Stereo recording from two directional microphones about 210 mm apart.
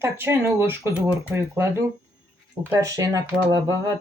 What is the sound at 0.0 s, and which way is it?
Speech, 10° right (ahead or behind).